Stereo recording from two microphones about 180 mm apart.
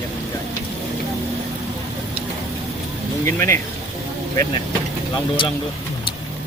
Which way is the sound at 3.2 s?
15° left (ahead or behind).